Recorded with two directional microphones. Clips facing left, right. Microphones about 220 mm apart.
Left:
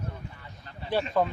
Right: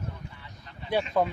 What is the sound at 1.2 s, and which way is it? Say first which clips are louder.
Speech: even; 15° right (ahead or behind).